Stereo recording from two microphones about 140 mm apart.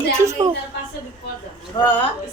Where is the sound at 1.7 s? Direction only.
35° left (ahead or behind).